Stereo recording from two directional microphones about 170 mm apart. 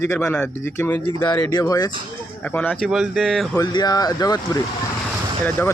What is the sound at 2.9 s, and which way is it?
Speech, centre (ahead or behind).